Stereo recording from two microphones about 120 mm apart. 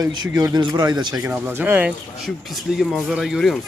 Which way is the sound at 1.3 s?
20° right (ahead or behind).